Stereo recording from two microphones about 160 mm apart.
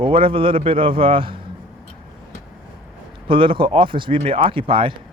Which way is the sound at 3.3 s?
35° right (ahead or behind).